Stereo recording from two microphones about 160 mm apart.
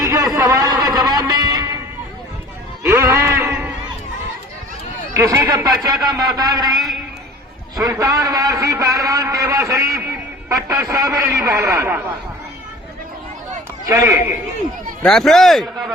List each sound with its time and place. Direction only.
0.0 s music: 20° right (ahead or behind)
2.8 s bleat: 15° right (ahead or behind)
5.1 s a man's voice: 15° right (ahead or behind)
6.7 s a sound: centre (ahead or behind)
7.8 s a man's voice: 20° right (ahead or behind)
13.8 s a man's voice: 20° right (ahead or behind)
15.0 s a man's voice: centre (ahead or behind)